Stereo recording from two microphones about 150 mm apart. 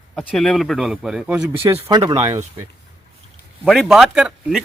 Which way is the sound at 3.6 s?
Centre (ahead or behind).